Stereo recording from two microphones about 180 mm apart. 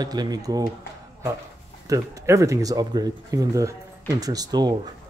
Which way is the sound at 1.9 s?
15° right (ahead or behind).